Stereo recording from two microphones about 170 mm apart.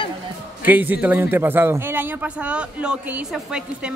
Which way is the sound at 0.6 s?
10° right (ahead or behind).